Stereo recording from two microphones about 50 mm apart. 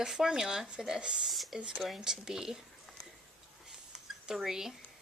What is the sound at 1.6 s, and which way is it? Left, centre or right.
Speech, centre.